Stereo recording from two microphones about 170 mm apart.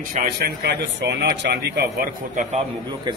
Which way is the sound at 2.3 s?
45° right (ahead or behind).